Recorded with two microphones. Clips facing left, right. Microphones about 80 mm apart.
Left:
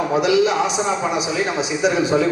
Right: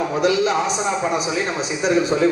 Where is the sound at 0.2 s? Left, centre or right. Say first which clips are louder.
Left 1 dB; right.